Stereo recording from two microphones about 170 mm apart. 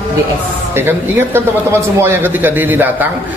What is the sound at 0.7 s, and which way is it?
A man's voice, 15° right (ahead or behind).